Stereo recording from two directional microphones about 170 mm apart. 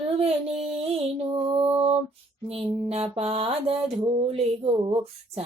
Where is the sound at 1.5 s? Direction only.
35° right (ahead or behind).